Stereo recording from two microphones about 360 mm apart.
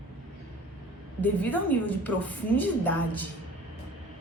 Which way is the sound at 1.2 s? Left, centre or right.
Centre.